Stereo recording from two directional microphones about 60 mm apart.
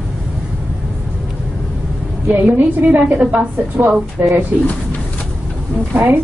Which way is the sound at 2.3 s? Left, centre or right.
Right.